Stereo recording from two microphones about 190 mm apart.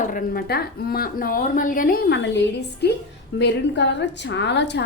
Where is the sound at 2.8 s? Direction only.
60° left (ahead or behind).